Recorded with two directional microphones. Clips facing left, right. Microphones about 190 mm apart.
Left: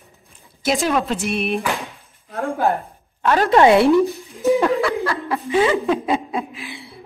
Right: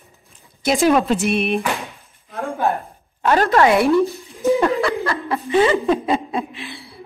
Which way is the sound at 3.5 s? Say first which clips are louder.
Left 4 dB; 25° left (ahead or behind).